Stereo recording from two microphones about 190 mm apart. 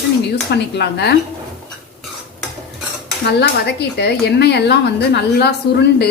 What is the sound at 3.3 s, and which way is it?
Speech, 60° left (ahead or behind).